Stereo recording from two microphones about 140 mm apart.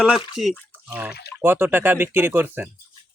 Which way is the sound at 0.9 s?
15° right (ahead or behind).